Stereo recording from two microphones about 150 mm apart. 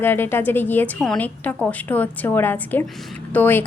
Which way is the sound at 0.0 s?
15° left (ahead or behind).